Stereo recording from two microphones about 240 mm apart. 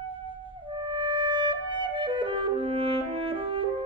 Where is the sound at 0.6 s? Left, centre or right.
Centre.